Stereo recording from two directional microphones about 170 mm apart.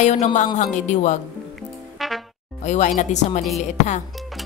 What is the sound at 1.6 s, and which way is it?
Music, centre (ahead or behind).